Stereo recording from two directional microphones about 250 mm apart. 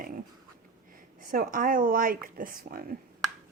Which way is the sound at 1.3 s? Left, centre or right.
Right.